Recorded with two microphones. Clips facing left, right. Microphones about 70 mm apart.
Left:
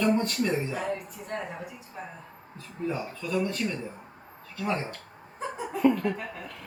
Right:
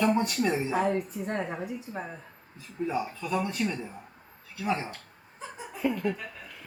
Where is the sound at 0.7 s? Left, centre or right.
Right.